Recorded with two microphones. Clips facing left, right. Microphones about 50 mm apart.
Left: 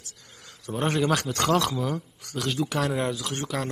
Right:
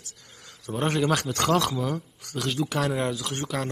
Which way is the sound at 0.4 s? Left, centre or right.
Right.